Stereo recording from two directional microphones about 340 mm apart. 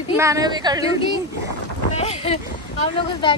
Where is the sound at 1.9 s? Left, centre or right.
Centre.